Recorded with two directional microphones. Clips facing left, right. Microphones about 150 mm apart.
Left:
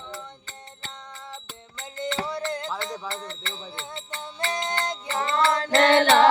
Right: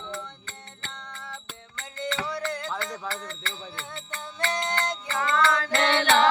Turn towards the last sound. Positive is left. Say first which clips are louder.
# left 5 dB
turn(degrees=50)  # may be behind; listen again after turning